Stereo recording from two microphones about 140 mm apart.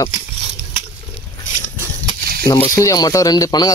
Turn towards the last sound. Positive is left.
turn(degrees=30)  # may be behind; listen again after turning